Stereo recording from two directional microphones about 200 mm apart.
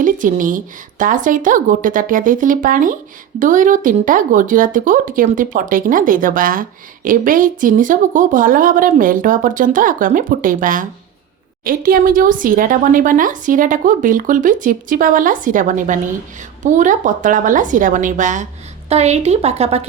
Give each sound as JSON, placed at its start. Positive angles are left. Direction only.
{"t": 0.0, "sound": "a woman's voice", "side_deg": -40}